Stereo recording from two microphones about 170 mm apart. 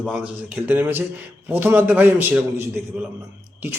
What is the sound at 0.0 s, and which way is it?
A man's voice, 5° right (ahead or behind).